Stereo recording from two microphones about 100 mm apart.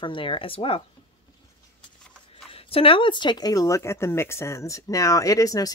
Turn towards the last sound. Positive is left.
turn(degrees=35)  # may be behind; listen again after turning